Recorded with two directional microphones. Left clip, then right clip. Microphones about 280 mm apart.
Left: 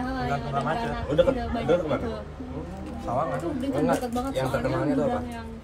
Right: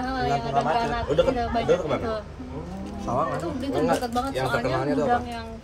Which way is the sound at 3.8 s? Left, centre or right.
Right.